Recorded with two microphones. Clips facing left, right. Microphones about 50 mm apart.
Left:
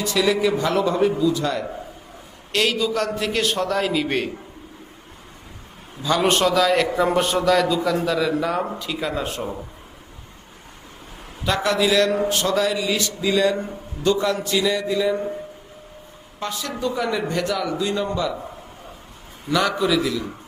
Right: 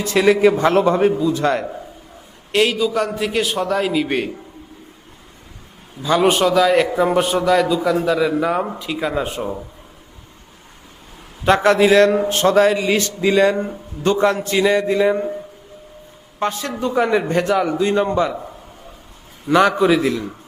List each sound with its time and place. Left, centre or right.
0.0 s a man's voice: right
2.5 s a man's voice: centre
6.0 s a man's voice: centre
11.4 s a man's voice: right
16.4 s a man's voice: right
19.5 s a man's voice: right